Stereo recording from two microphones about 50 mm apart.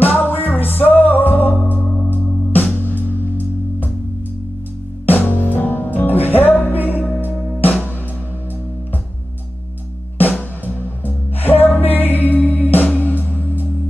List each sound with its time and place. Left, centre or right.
0.1 s music: left
5.0 s music: left
10.1 s music: left